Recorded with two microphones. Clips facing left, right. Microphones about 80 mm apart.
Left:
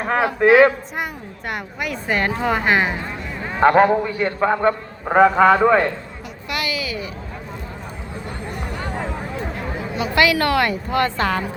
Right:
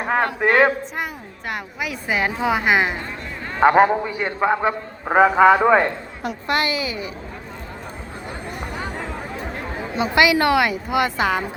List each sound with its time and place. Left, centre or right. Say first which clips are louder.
0.0 s a man's voice: left 2 dB; centre
6.5 s a woman's voice: right 3 dB; right
8.6 s a sound: right 1 dB; centre
9.9 s a woman's voice: right 1 dB; right